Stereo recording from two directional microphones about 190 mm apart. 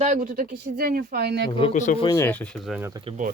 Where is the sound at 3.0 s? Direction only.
40° right (ahead or behind).